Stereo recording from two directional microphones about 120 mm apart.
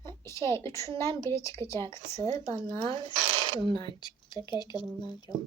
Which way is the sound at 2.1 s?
35° right (ahead or behind).